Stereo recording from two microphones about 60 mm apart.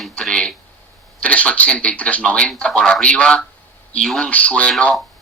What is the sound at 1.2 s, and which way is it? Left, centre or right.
Speech, left.